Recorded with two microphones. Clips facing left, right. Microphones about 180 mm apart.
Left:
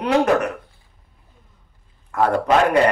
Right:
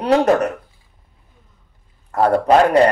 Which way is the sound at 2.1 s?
35° right (ahead or behind).